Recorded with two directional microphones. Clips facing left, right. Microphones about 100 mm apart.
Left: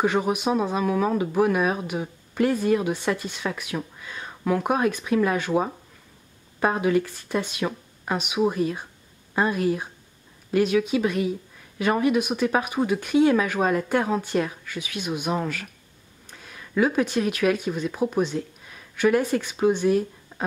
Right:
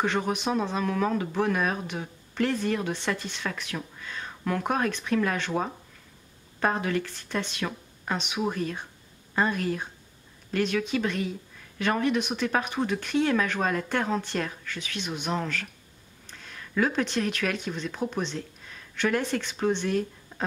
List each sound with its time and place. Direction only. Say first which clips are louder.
0.0 s speech: left 4 dB; 10° left (ahead or behind)